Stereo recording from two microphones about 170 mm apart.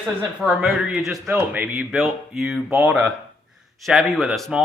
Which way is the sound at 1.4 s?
15° right (ahead or behind).